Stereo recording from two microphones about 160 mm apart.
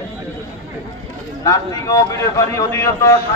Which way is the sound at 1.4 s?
20° left (ahead or behind).